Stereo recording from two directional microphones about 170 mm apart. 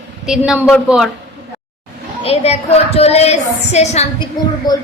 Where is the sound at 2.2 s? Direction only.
35° left (ahead or behind).